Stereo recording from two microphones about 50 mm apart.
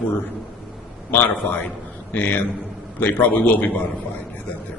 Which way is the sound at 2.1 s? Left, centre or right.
Left.